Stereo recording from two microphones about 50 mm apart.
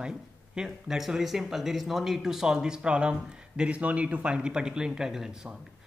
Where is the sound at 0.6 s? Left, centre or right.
Centre.